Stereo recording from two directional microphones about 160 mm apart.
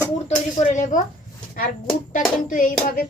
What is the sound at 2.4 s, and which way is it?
Speech, 55° left (ahead or behind).